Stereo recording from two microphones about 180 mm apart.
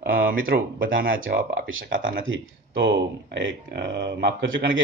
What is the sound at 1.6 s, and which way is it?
Speech, 90° right.